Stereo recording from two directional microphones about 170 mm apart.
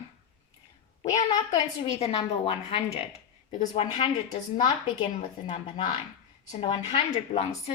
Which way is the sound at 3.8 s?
35° left (ahead or behind).